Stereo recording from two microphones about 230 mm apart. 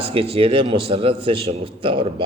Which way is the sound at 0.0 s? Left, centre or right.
Right.